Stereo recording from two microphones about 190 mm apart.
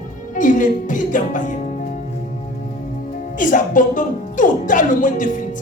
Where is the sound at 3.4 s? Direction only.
45° left (ahead or behind).